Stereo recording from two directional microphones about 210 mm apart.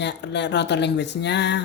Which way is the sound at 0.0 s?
55° left (ahead or behind).